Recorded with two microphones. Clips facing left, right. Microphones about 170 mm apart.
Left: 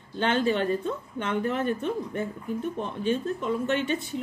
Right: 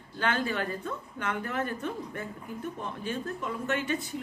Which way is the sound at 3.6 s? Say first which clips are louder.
Left 2 dB; 25° left (ahead or behind).